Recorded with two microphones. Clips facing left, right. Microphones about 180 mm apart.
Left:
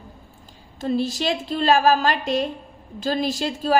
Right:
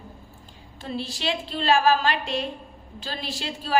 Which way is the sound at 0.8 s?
45° left (ahead or behind).